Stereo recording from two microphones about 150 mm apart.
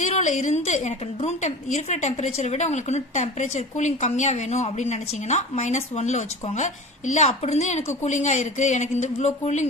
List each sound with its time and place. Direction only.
0.0 s a woman's voice: 55° left (ahead or behind)